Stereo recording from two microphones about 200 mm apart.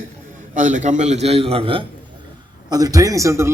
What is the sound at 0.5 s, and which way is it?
A man's voice, 40° right (ahead or behind).